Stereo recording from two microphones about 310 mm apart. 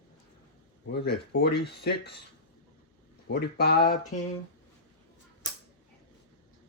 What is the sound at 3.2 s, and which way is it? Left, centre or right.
Speech, left.